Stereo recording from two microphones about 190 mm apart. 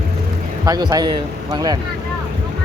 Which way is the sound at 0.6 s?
20° right (ahead or behind).